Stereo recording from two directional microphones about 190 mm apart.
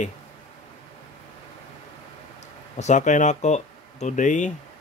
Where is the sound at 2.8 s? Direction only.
40° left (ahead or behind).